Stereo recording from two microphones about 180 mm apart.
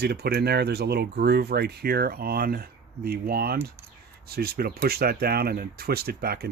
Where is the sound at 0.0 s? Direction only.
65° right (ahead or behind).